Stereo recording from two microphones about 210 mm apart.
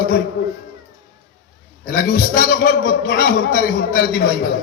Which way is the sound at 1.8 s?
45° left (ahead or behind).